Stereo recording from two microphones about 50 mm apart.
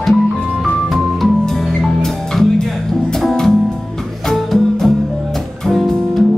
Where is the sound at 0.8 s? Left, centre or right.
Centre.